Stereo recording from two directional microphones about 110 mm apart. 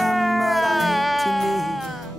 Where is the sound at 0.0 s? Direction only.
Centre (ahead or behind).